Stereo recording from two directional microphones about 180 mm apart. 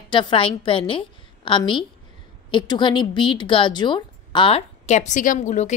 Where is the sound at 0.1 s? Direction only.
25° left (ahead or behind).